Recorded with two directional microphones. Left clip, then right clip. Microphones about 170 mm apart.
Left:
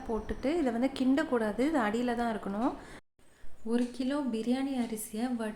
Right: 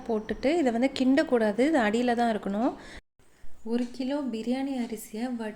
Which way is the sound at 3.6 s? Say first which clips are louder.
Right 2 dB; centre (ahead or behind).